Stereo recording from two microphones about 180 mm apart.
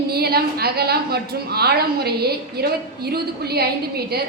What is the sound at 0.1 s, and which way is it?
A woman's voice, 60° right (ahead or behind).